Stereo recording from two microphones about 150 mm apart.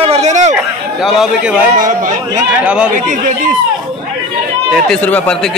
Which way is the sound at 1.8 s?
60° right (ahead or behind).